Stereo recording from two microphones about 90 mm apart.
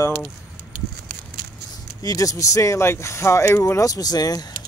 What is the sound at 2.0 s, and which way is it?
Speech, 40° left (ahead or behind).